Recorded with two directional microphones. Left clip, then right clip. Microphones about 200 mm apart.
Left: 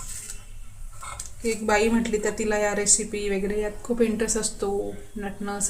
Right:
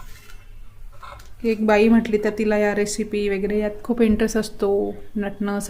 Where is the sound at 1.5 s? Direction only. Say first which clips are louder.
Right 5 dB; 50° right (ahead or behind).